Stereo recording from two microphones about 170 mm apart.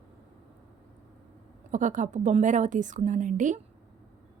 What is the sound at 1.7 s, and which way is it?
A woman's voice, 45° right (ahead or behind).